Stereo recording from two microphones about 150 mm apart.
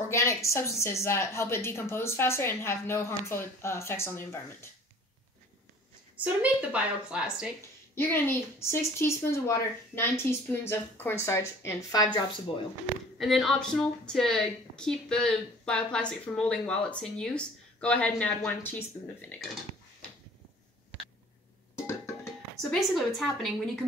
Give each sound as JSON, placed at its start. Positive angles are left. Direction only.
{"t": 0.1, "sound": "a woman's voice", "side_deg": 20}
{"t": 6.1, "sound": "a woman's voice", "side_deg": -10}
{"t": 7.9, "sound": "a woman's voice", "side_deg": 15}
{"t": 13.2, "sound": "a woman's voice", "side_deg": 0}
{"t": 21.8, "sound": "music", "side_deg": 20}
{"t": 22.6, "sound": "a woman's voice", "side_deg": 0}